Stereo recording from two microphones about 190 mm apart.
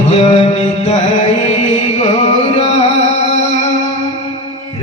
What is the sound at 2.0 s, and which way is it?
Music, 35° left (ahead or behind).